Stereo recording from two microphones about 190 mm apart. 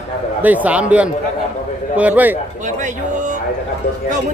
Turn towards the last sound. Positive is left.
turn(degrees=-40)  # may be behind; listen again after turning